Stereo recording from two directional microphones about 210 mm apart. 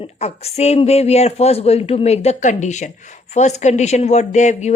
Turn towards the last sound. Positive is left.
turn(degrees=35)  # may be behind; listen again after turning